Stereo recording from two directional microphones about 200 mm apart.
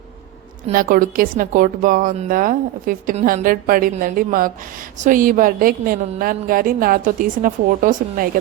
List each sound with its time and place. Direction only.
0.7 s a woman's voice: 45° right (ahead or behind)